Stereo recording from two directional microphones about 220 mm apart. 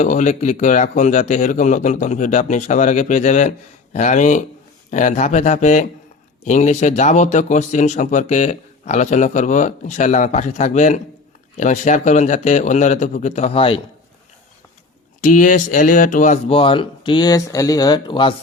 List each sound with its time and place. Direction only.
0.0 s speech: 35° left (ahead or behind)
15.2 s speech: 35° left (ahead or behind); by 18.3 s 20° left (ahead or behind)